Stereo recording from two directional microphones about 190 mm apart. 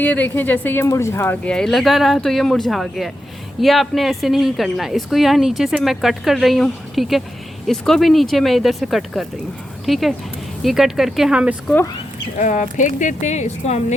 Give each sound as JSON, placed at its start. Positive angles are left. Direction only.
{"t": 0.0, "sound": "a woman's voice", "side_deg": 10}
{"t": 12.4, "sound": "a woman's voice", "side_deg": 40}